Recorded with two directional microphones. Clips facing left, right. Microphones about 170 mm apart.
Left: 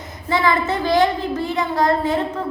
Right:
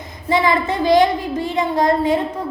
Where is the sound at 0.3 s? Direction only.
20° right (ahead or behind).